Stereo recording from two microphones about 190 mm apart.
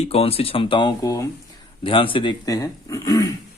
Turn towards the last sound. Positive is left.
turn(degrees=15)  # may be behind; listen again after turning